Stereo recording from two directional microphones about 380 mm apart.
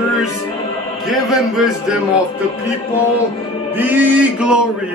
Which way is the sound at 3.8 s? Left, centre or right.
Centre.